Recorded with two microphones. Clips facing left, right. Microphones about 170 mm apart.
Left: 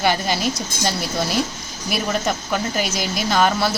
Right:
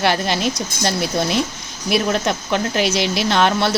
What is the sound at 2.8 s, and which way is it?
Speech, 70° right (ahead or behind).